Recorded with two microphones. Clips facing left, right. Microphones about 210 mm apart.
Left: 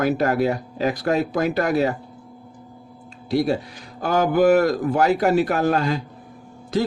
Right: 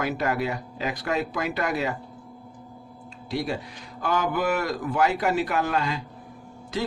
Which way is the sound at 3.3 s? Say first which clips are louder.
Left 8 dB; 40° left (ahead or behind).